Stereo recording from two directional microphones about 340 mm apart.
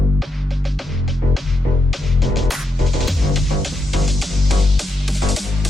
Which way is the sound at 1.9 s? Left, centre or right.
Centre.